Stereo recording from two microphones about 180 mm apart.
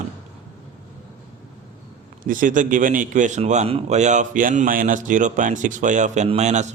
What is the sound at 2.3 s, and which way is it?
A man's voice, 50° right (ahead or behind).